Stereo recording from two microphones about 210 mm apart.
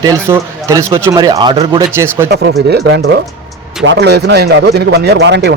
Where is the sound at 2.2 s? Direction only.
50° right (ahead or behind).